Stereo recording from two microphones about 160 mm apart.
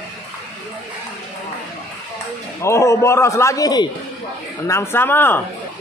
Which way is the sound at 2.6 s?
15° left (ahead or behind).